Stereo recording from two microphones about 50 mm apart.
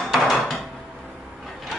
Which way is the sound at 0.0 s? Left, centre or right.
Centre.